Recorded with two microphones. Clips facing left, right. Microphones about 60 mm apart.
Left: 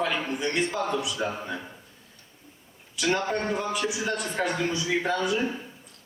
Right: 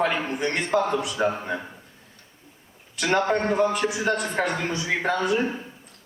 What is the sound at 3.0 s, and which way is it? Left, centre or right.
A man's voice, right.